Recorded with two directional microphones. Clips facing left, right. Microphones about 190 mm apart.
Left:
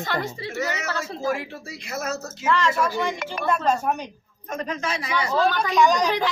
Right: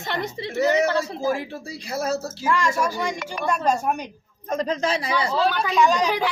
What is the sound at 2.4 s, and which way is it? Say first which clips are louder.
Speech: left 1 dB; 10° right (ahead or behind).